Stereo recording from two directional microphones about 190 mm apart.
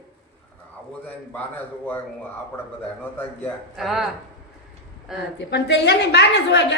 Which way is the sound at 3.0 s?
10° left (ahead or behind).